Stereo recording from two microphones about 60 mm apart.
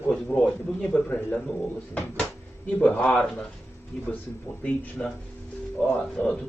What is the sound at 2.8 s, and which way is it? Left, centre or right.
Speech, left.